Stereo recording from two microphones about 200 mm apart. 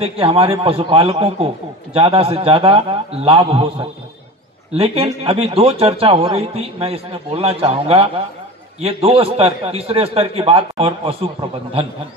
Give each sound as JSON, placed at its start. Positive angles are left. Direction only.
{"t": 0.0, "sound": "speech", "side_deg": -30}
{"t": 4.7, "sound": "speech", "side_deg": -30}